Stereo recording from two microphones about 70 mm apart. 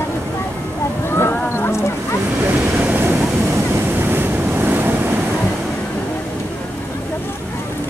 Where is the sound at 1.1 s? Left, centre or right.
Left.